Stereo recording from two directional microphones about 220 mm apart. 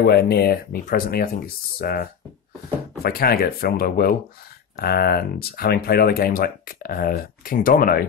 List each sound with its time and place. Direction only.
0.0 s speech: 45° left (ahead or behind)